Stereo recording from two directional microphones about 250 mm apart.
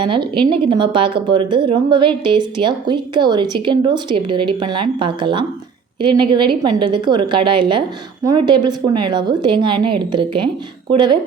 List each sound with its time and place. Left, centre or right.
0.0 s a woman's voice: centre